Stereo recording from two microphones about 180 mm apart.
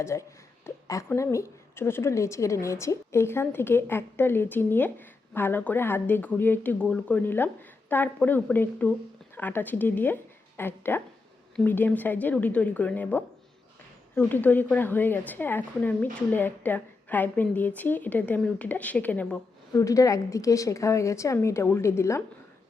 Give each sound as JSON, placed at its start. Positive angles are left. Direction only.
{"t": 0.0, "sound": "a woman's voice", "side_deg": 15}